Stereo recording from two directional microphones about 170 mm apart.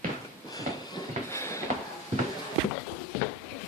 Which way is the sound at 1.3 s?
15° left (ahead or behind).